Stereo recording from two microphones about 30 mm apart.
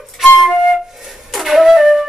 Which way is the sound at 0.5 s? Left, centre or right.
Centre.